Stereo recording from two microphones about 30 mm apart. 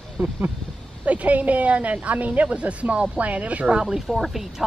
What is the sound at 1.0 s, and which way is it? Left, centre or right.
A woman's voice, right.